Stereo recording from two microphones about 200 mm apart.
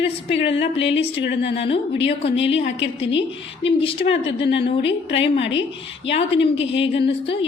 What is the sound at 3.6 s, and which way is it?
Speech, 25° left (ahead or behind).